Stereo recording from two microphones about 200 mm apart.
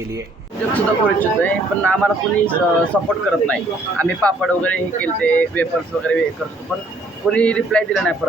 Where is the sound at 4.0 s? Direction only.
5° left (ahead or behind).